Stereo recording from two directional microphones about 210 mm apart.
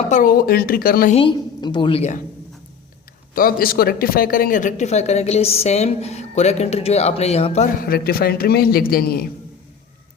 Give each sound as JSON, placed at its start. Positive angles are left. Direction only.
{"t": 0.1, "sound": "speech", "side_deg": 40}
{"t": 1.1, "sound": "a woman's voice", "side_deg": 25}
{"t": 3.3, "sound": "speech", "side_deg": 45}